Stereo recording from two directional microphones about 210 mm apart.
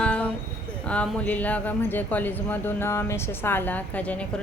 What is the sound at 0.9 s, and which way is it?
Speech, 5° left (ahead or behind).